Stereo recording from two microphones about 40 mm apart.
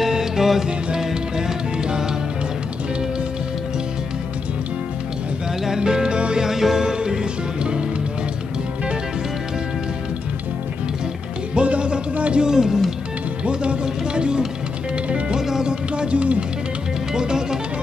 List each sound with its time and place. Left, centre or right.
0.0 s music: centre
5.7 s music: centre
6.4 s music: centre
11.5 s music: right
12.4 s music: centre
13.5 s a sound: right
15.0 s music: right
15.3 s music: centre
15.7 s music: right
17.1 s music: centre